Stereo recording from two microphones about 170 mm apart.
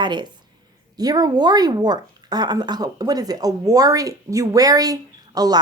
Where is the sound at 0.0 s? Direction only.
25° right (ahead or behind).